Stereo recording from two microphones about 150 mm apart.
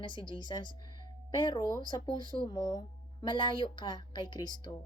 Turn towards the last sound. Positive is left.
turn(degrees=30)  # may be behind; listen again after turning